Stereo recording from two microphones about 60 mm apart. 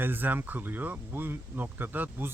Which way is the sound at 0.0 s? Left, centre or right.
Right.